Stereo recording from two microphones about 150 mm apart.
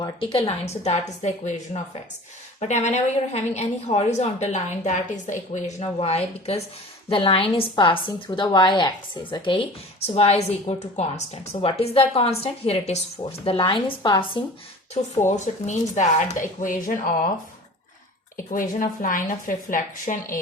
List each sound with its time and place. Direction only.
0.0 s a woman's voice: 35° left (ahead or behind)
15.0 s a woman's voice: 50° left (ahead or behind)
18.5 s a woman's voice: 65° left (ahead or behind)